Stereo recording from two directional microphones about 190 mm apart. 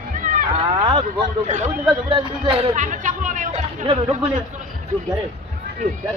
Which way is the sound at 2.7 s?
40° right (ahead or behind).